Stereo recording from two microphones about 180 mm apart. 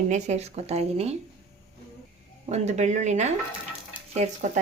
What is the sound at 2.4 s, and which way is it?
Speech, 40° right (ahead or behind).